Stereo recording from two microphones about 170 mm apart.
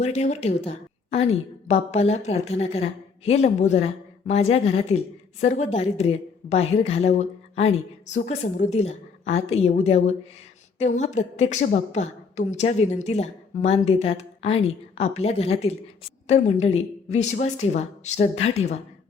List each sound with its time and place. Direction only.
0.0 s a woman's voice: 40° left (ahead or behind)